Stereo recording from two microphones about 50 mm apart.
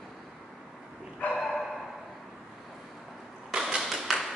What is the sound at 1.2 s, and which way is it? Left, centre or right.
Bow-wow, left.